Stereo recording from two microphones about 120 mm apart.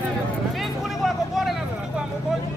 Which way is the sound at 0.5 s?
Centre (ahead or behind).